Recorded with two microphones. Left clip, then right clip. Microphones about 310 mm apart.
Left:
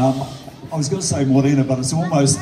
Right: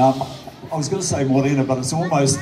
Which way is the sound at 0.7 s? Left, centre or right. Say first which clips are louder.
Even; right.